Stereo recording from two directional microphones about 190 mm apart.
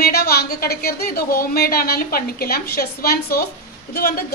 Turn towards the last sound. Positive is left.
turn(degrees=55)  # may be behind; listen again after turning